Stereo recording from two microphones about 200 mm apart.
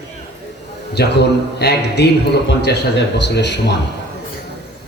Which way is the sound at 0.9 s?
55° left (ahead or behind).